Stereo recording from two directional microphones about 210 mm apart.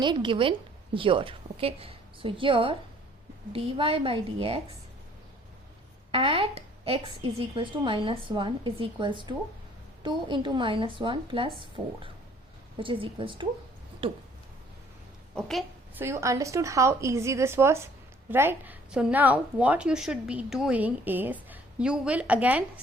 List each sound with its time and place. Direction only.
0.0 s a woman's voice: 25° right (ahead or behind)
6.1 s a woman's voice: 25° right (ahead or behind)
12.7 s a woman's voice: 25° right (ahead or behind)
15.4 s a woman's voice: centre (ahead or behind)
16.0 s a woman's voice: 15° right (ahead or behind)